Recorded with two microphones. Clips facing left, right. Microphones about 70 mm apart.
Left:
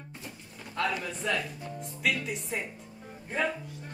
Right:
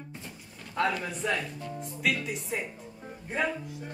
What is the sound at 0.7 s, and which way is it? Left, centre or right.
Speech, right.